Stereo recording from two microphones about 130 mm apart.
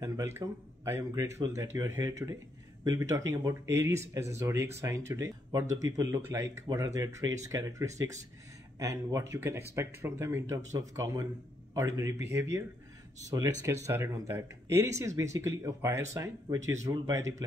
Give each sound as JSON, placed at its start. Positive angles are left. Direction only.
{"t": 0.0, "sound": "speech", "side_deg": -20}